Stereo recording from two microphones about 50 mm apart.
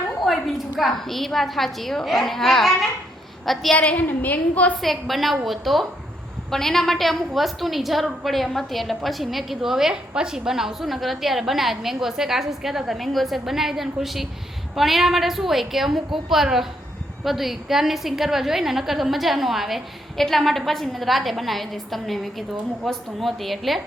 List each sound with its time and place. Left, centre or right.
0.3 s a sound: centre
0.8 s a woman's voice: centre
3.8 s a woman's voice: left
4.8 s a woman's voice: centre